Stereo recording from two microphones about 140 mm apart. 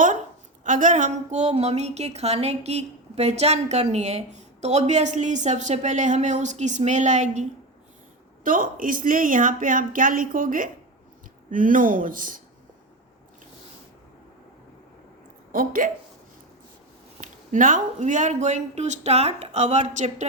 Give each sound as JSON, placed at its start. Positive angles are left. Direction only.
{"t": 0.6, "sound": "a woman's voice", "side_deg": -65}
{"t": 8.4, "sound": "speech", "side_deg": -75}
{"t": 15.5, "sound": "speech", "side_deg": -80}
{"t": 17.2, "sound": "a woman's voice", "side_deg": -70}